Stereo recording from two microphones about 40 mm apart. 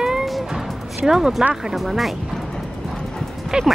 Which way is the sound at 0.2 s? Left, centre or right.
Centre.